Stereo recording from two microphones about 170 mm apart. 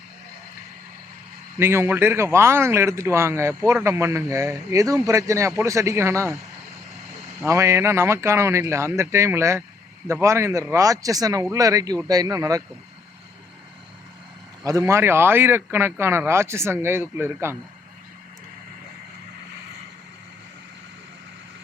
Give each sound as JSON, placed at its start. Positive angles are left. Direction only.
{"t": 1.5, "sound": "a man's voice", "side_deg": -15}
{"t": 7.4, "sound": "a man's voice", "side_deg": -15}
{"t": 14.6, "sound": "a man's voice", "side_deg": -20}